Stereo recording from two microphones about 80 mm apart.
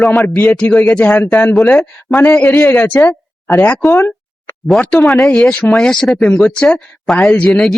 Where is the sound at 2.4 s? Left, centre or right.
Centre.